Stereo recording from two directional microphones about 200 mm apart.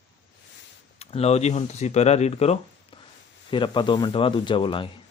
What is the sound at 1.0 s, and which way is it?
Speech, 30° left (ahead or behind).